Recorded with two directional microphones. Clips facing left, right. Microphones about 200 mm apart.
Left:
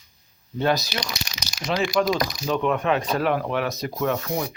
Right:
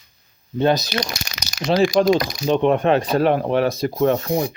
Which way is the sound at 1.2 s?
65° right (ahead or behind).